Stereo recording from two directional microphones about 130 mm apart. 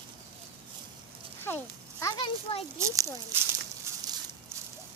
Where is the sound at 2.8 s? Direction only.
25° right (ahead or behind).